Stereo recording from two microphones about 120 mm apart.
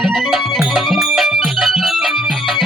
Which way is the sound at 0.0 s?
Centre (ahead or behind).